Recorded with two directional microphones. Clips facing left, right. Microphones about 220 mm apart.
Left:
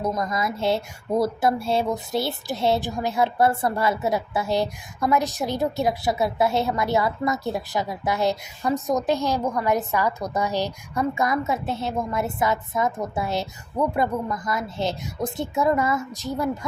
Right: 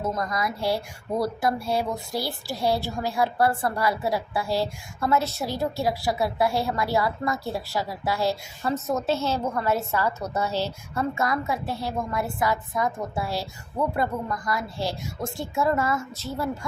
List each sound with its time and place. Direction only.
0.0 s a woman's voice: 20° left (ahead or behind)